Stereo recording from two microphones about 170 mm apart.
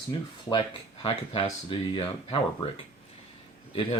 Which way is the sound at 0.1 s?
30° left (ahead or behind).